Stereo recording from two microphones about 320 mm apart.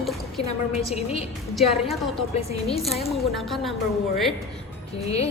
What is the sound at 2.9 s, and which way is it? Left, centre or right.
Speech, centre.